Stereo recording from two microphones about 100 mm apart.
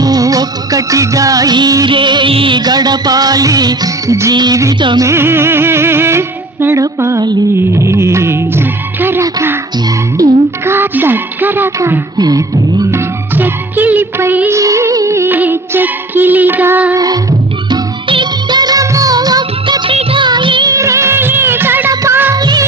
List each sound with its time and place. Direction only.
0.0 s music of bollywood: 40° right (ahead or behind)
1.9 s music: 55° right (ahead or behind)
2.6 s music: 45° right (ahead or behind)
4.4 s music: 45° right (ahead or behind)
4.9 s music: 25° right (ahead or behind)
10.2 s music: 35° right (ahead or behind)
10.7 s a sound: 20° right (ahead or behind)
12.1 s music: 40° right (ahead or behind)
13.3 s music: 20° right (ahead or behind)
14.6 s music: 30° right (ahead or behind); by 16.9 s 15° right (ahead or behind)
16.9 s music: 40° right (ahead or behind)
17.7 s music of bollywood: 50° right (ahead or behind)
20.7 s music of bollywood: 30° right (ahead or behind)
22.4 s music of bollywood: 40° right (ahead or behind)